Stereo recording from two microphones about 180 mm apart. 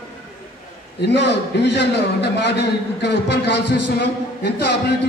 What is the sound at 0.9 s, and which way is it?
A man's voice, 70° left (ahead or behind).